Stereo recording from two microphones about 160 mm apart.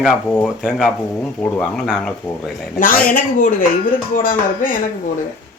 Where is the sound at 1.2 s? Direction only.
10° left (ahead or behind).